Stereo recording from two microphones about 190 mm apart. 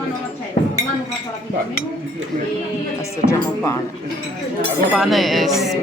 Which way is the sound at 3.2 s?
50° right (ahead or behind).